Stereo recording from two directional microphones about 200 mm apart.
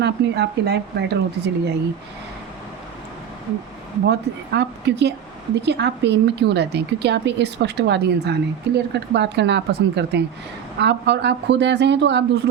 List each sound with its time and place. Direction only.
0.0 s a woman's voice: 55° right (ahead or behind)
4.0 s a woman's voice: 55° right (ahead or behind)